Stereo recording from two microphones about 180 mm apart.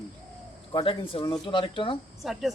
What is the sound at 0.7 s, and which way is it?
Speech, 30° left (ahead or behind).